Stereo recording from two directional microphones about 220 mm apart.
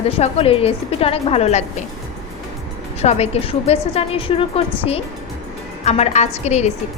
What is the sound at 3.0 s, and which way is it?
A woman's voice, 30° left (ahead or behind).